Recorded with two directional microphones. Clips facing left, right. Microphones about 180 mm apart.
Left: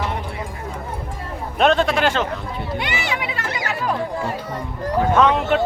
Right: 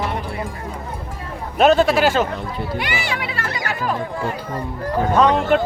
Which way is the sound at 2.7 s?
20° left (ahead or behind).